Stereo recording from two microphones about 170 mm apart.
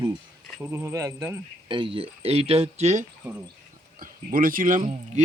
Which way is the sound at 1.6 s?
30° right (ahead or behind).